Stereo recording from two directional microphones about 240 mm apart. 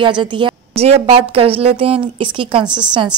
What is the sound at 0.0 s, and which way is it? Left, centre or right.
A woman's voice, centre.